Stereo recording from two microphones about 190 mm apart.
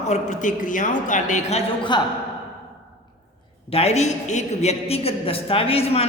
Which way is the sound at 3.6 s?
30° left (ahead or behind).